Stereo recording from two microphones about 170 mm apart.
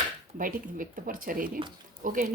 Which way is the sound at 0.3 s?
55° right (ahead or behind).